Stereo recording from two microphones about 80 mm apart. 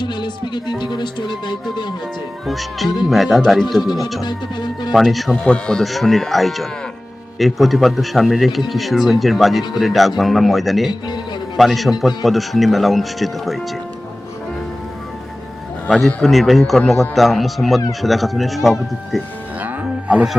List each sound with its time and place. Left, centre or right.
0.0 s speech: left
2.5 s speech: centre
4.3 s music: left
4.9 s speech: centre
5.5 s speech: centre
15.9 s speech: centre
19.6 s music: centre